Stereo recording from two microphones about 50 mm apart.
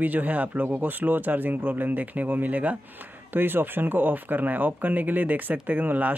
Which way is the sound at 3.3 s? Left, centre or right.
Right.